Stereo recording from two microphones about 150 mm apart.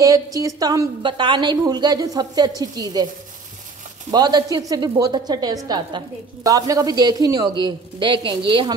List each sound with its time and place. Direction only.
0.0 s a woman's voice: 20° right (ahead or behind)
4.1 s a woman's voice: 25° right (ahead or behind)